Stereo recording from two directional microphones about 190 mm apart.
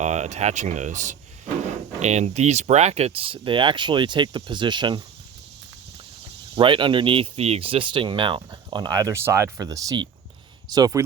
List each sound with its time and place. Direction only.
0.0 s speech: 35° right (ahead or behind)
6.6 s speech: 25° right (ahead or behind)